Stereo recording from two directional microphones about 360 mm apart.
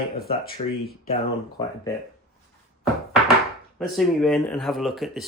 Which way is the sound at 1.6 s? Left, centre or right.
Centre.